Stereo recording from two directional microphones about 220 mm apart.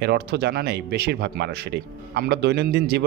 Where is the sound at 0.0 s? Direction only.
50° right (ahead or behind).